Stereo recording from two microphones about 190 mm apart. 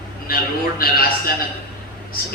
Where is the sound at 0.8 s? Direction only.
50° left (ahead or behind).